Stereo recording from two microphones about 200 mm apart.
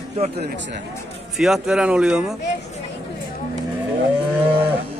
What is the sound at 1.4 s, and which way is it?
Speech, centre (ahead or behind).